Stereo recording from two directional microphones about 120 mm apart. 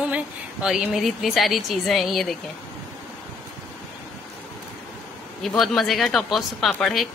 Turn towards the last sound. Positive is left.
turn(degrees=0)  # may be behind; listen again after turning